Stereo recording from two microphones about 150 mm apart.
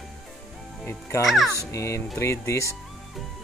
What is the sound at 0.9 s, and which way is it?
Music, 20° left (ahead or behind).